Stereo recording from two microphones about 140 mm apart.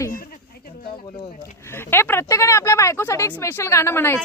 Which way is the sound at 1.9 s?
15° left (ahead or behind).